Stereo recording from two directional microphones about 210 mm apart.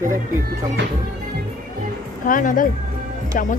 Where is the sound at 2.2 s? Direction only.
40° left (ahead or behind).